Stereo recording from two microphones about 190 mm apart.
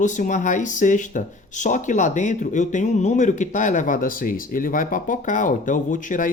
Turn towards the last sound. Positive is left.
turn(degrees=45)  # may be behind; listen again after turning